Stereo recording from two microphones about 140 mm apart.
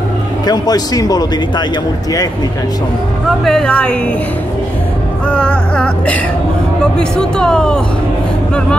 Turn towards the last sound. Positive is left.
turn(degrees=5)  # may be behind; listen again after turning